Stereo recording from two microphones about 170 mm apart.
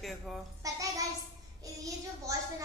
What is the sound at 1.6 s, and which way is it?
A child's voice, 20° right (ahead or behind).